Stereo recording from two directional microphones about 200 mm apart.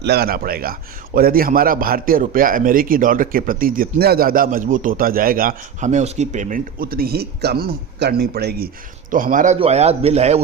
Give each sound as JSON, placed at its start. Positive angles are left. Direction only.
{"t": 0.0, "sound": "a man's voice", "side_deg": -55}